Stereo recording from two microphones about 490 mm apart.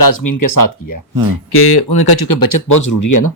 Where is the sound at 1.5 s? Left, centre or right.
Left.